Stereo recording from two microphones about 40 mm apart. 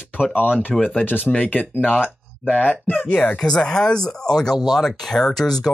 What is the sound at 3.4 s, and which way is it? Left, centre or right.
Speech, centre.